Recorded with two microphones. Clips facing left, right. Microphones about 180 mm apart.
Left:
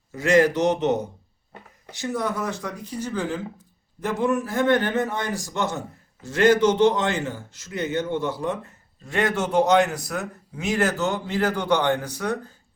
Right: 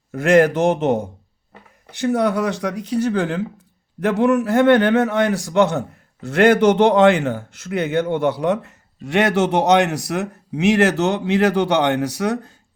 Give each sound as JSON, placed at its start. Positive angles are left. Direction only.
{"t": 0.1, "sound": "speech", "side_deg": -55}
{"t": 2.0, "sound": "a man's voice", "side_deg": -65}